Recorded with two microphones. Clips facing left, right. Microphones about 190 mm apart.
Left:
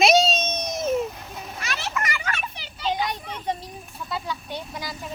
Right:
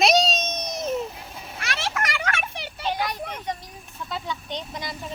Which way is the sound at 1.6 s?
60° right (ahead or behind).